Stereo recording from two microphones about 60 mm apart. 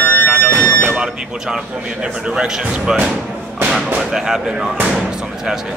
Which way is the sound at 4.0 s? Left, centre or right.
Centre.